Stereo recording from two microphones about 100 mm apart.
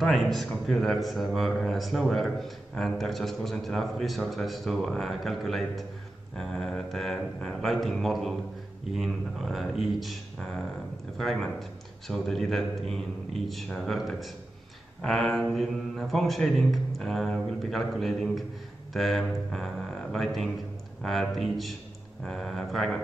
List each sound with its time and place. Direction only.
0.0 s a man's voice: centre (ahead or behind)